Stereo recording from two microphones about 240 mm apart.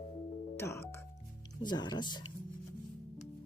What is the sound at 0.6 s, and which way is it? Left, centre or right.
Music, centre.